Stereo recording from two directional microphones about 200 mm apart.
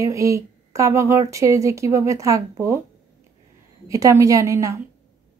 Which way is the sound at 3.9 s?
15° right (ahead or behind).